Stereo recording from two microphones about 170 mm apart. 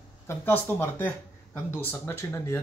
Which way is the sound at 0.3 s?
15° left (ahead or behind).